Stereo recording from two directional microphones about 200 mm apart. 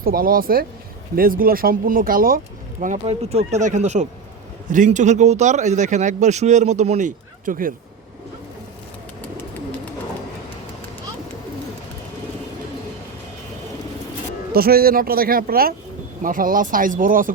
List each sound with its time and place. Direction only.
0.0 s speech: 45° right (ahead or behind)
14.5 s speech: 50° right (ahead or behind)